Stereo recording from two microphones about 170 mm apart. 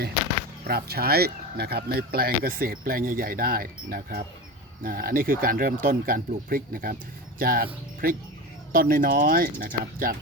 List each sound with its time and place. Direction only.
0.7 s speech: 65° right (ahead or behind)